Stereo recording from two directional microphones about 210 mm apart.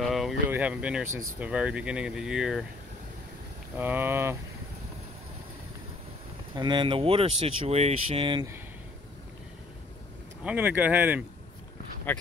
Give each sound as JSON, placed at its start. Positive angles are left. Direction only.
{"t": 0.0, "sound": "speech", "side_deg": 0}
{"t": 3.7, "sound": "speech", "side_deg": -10}
{"t": 6.5, "sound": "speech", "side_deg": -20}
{"t": 10.4, "sound": "speech", "side_deg": -5}